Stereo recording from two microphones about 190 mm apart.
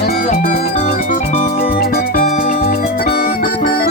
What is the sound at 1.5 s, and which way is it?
Music, 55° left (ahead or behind).